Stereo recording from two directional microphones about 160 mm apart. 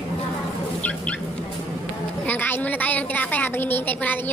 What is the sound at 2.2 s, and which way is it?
A woman's voice, 10° left (ahead or behind).